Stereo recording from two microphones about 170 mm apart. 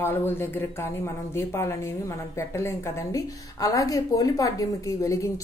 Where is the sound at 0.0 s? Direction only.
15° left (ahead or behind).